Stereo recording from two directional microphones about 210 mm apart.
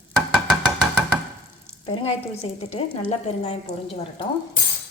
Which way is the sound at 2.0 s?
30° left (ahead or behind).